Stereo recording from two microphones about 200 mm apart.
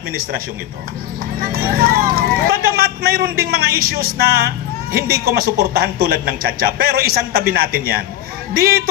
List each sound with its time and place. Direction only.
1.4 s speech: 50° right (ahead or behind)